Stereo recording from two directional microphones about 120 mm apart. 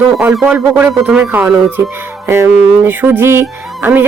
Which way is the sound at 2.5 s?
10° right (ahead or behind).